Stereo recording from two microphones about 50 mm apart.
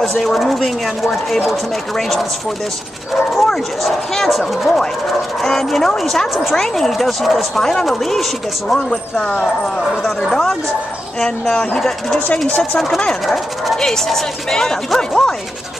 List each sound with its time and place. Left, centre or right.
0.0 s speech: centre
3.4 s speech: centre
9.2 s speech: centre
12.4 s speech: left
13.7 s speech: centre